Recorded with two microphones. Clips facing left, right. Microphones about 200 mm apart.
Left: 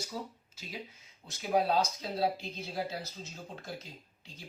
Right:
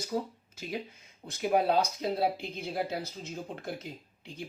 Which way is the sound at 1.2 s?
55° right (ahead or behind).